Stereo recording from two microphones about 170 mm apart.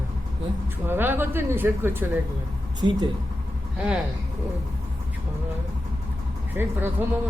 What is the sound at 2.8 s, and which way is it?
Speech, 25° right (ahead or behind).